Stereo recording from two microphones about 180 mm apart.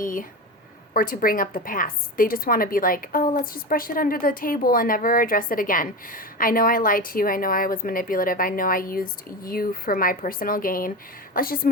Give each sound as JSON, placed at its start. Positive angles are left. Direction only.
{"t": 0.0, "sound": "a woman's voice", "side_deg": 50}